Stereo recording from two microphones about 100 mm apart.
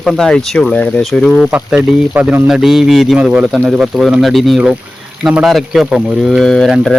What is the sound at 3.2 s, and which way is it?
Speech, 10° right (ahead or behind).